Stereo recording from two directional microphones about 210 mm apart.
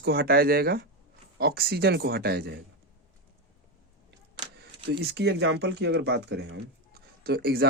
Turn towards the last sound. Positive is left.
turn(degrees=-50)  # may be behind; listen again after turning